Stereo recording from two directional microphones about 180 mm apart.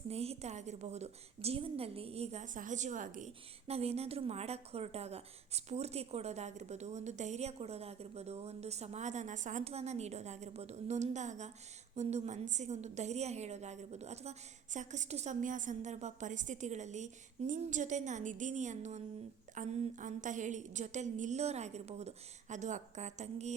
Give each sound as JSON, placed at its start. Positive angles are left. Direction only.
{"t": 0.1, "sound": "a woman's voice", "side_deg": -35}